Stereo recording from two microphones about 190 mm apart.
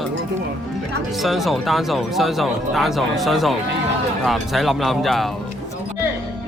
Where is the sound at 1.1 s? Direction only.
Centre (ahead or behind).